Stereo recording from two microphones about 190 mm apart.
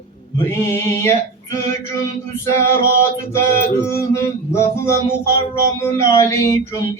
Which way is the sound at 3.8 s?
15° left (ahead or behind).